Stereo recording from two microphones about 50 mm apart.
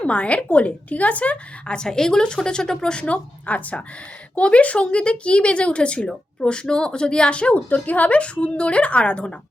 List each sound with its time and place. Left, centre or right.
0.0 s speech: left